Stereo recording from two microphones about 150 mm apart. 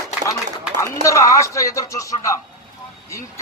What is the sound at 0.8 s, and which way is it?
Speech, 20° left (ahead or behind).